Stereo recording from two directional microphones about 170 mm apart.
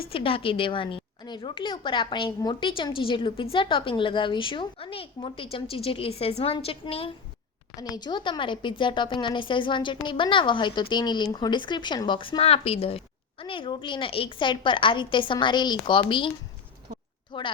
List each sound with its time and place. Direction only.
0.0 s a woman's voice: 30° left (ahead or behind)
7.8 s speech: 25° left (ahead or behind)
17.3 s speech: 30° left (ahead or behind)